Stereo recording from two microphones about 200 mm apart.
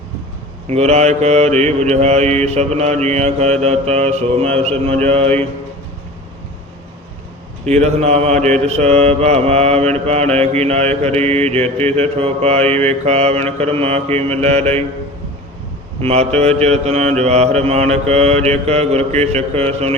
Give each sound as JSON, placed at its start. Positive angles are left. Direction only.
{"t": 0.7, "sound": "mantra", "side_deg": -35}
{"t": 7.6, "sound": "mantra", "side_deg": -35}
{"t": 16.0, "sound": "mantra", "side_deg": -35}